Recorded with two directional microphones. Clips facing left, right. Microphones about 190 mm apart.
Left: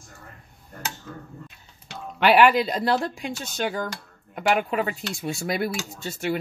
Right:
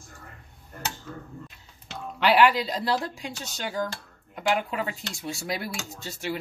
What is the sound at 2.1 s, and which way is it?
Dishes, 55° left (ahead or behind).